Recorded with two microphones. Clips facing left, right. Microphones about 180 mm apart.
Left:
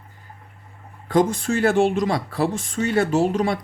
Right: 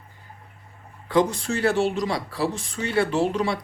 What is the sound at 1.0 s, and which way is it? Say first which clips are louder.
Speech: left 2 dB; 45° left (ahead or behind).